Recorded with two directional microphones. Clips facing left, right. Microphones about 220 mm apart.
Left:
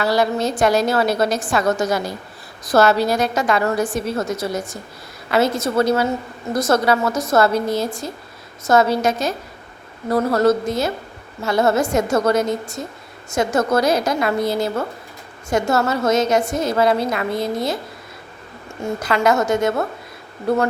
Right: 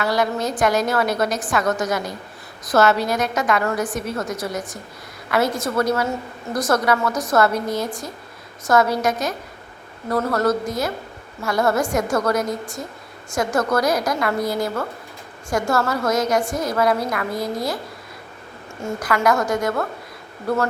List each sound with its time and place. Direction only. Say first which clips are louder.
0.0 s a woman's voice: left 3 dB; 30° left (ahead or behind)
18.9 s a woman's voice: left 2 dB; 25° left (ahead or behind)